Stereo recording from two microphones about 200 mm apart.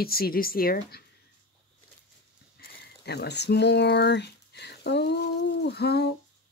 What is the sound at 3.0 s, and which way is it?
Speech, 55° left (ahead or behind).